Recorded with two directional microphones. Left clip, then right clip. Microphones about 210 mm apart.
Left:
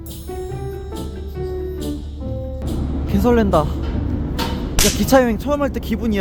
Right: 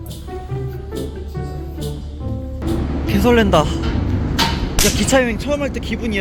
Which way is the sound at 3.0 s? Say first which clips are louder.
Right 2 dB; 10° left (ahead or behind).